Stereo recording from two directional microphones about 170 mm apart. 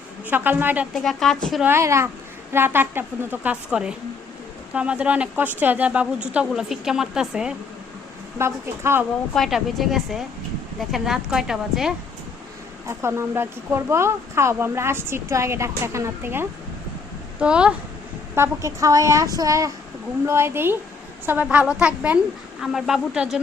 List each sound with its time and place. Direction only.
0.3 s speech: 10° right (ahead or behind)
0.9 s speech: centre (ahead or behind)
1.6 s speech: 15° right (ahead or behind)
8.4 s speech: 15° right (ahead or behind)
9.3 s speech: centre (ahead or behind)
12.9 s speech: 15° right (ahead or behind)
18.3 s speech: 15° right (ahead or behind)